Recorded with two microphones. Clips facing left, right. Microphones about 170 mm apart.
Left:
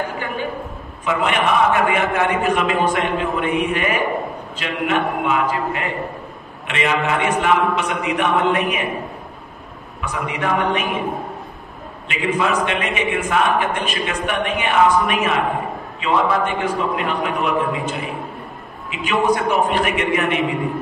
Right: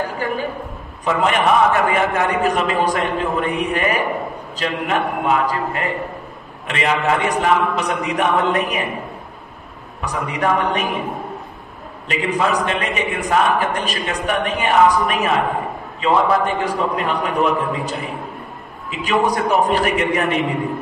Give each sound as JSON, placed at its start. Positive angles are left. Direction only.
{"t": 1.0, "sound": "a man's voice", "side_deg": -40}
{"t": 10.0, "sound": "a man's voice", "side_deg": -40}
{"t": 12.1, "sound": "a man's voice", "side_deg": -40}